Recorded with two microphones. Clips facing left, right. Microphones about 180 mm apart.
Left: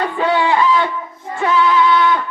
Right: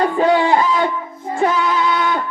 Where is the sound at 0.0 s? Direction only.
40° right (ahead or behind).